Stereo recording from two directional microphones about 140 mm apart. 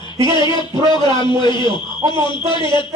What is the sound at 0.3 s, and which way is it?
A man's voice, 35° left (ahead or behind).